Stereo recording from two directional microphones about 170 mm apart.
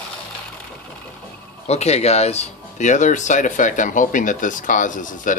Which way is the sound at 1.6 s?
40° left (ahead or behind).